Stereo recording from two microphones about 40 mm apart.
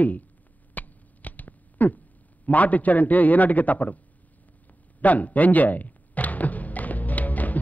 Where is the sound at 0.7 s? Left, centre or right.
Left.